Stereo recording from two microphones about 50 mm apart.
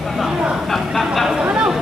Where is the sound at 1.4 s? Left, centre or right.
Right.